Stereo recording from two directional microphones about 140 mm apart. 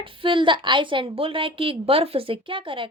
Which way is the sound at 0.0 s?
40° right (ahead or behind).